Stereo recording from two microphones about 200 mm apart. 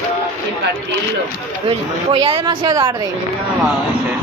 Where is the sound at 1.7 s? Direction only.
25° right (ahead or behind).